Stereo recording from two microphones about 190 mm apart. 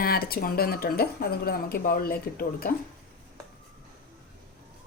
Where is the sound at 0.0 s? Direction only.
50° left (ahead or behind).